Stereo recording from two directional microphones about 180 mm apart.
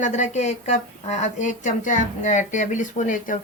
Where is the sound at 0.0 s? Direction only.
40° left (ahead or behind).